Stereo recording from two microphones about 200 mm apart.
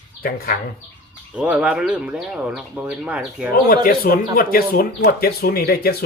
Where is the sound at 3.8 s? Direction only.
45° left (ahead or behind).